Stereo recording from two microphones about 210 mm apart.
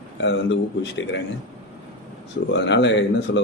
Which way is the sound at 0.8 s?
60° left (ahead or behind).